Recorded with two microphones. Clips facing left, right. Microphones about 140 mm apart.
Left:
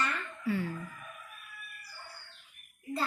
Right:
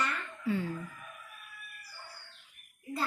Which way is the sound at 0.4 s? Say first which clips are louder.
Even; 20° right (ahead or behind).